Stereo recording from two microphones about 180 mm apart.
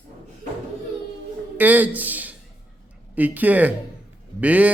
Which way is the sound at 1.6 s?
10° right (ahead or behind).